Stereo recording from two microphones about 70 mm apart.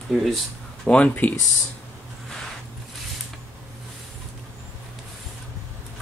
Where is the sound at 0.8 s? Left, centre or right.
Centre.